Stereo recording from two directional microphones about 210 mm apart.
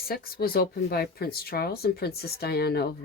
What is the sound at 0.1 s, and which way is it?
Speech, 45° left (ahead or behind).